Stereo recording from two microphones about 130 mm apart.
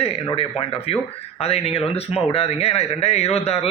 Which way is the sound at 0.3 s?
45° left (ahead or behind).